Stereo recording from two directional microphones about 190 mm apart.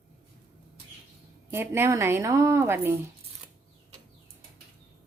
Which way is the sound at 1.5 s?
15° right (ahead or behind).